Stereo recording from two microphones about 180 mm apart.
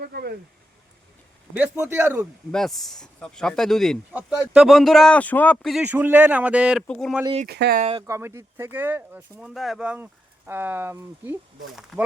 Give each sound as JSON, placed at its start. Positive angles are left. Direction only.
{"t": 0.0, "sound": "speech", "side_deg": -60}
{"t": 1.5, "sound": "speech", "side_deg": -10}
{"t": 2.5, "sound": "speech", "side_deg": 0}
{"t": 7.4, "sound": "speech", "side_deg": -60}
{"t": 7.8, "sound": "speech", "side_deg": -35}
{"t": 8.0, "sound": "speech", "side_deg": -15}
{"t": 11.9, "sound": "speech", "side_deg": 0}